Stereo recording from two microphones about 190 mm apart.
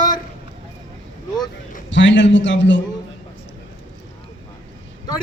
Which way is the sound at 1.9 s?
75° left (ahead or behind).